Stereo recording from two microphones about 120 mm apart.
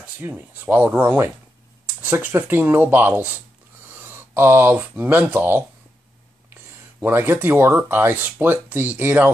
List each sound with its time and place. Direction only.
0.0 s speech: 15° right (ahead or behind)